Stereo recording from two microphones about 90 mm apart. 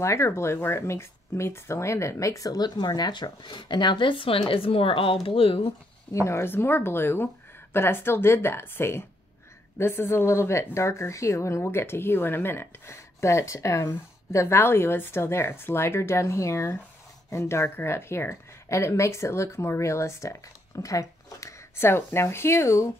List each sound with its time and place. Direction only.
0.0 s speech: 30° left (ahead or behind); by 5.7 s 85° left
6.1 s speech: 30° left (ahead or behind)